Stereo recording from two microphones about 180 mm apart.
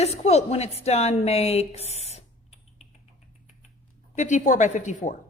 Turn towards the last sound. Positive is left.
turn(degrees=45)  # may be behind; listen again after turning